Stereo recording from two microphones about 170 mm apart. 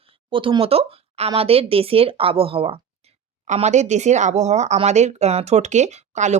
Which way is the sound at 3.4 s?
45° right (ahead or behind).